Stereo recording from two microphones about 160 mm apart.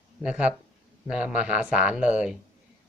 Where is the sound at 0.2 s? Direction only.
5° right (ahead or behind).